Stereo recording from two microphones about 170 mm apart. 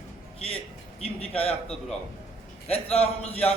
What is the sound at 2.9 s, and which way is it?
Speech, 35° left (ahead or behind).